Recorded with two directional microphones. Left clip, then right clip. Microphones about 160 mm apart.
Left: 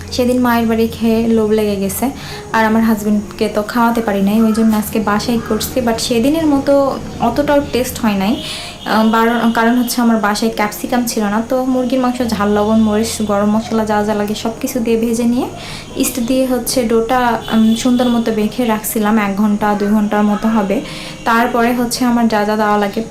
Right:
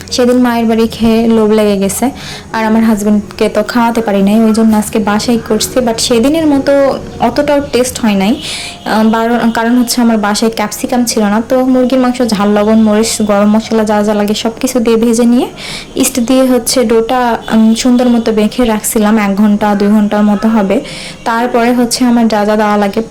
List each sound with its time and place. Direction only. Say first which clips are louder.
0.4 s a woman's voice: right 3 dB; 35° right (ahead or behind)